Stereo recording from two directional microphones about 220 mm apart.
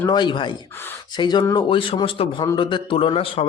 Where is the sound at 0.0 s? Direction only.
20° left (ahead or behind).